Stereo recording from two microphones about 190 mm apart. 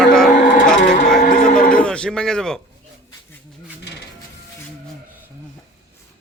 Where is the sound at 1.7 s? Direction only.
5° left (ahead or behind).